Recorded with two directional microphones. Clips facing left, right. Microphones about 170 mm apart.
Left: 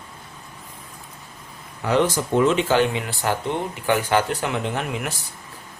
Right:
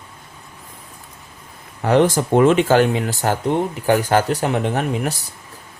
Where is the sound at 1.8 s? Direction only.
50° right (ahead or behind).